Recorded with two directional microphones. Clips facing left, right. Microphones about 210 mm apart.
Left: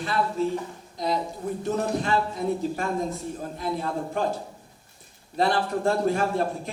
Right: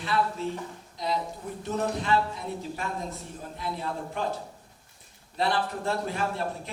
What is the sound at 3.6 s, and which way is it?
Speech, 45° left (ahead or behind).